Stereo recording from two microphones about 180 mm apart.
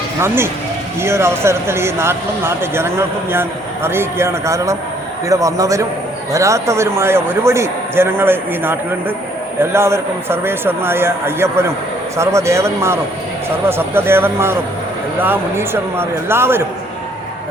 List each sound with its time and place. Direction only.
0.2 s a man's voice: 15° right (ahead or behind)